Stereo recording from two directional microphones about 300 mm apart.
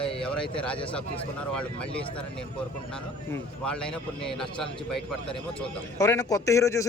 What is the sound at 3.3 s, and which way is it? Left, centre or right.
A man's voice, centre.